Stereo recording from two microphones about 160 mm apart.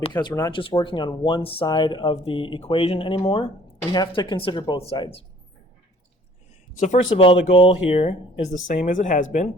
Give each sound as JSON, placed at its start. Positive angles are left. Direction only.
{"t": 0.1, "sound": "speech", "side_deg": 25}
{"t": 6.7, "sound": "speech", "side_deg": 50}
{"t": 7.2, "sound": "speech", "side_deg": 35}